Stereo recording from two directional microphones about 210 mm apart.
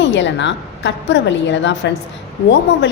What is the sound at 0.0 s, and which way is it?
A woman's voice, 60° left (ahead or behind).